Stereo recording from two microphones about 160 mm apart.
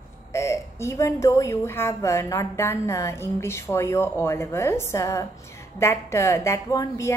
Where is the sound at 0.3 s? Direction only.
15° left (ahead or behind).